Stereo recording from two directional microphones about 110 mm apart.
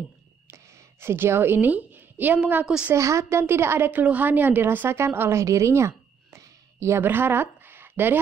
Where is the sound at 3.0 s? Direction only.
25° right (ahead or behind).